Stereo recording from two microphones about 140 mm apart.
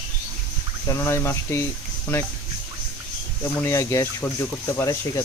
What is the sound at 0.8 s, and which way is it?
Speech, 20° left (ahead or behind).